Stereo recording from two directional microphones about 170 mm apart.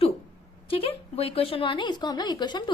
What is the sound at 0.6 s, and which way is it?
Speech, 35° left (ahead or behind).